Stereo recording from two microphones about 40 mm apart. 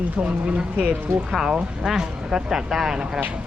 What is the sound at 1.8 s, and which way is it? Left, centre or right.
Speech, centre.